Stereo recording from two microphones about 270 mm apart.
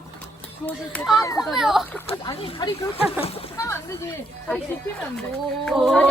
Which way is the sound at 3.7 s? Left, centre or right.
Centre.